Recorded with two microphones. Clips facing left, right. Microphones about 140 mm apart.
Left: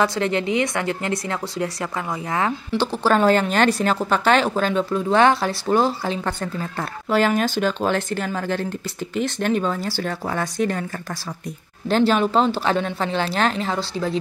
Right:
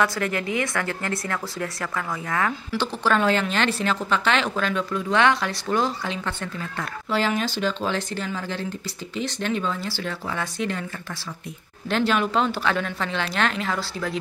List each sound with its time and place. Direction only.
0.0 s a woman's voice: 25° left (ahead or behind)
7.2 s speech: 50° left (ahead or behind)
11.9 s a woman's voice: 35° left (ahead or behind)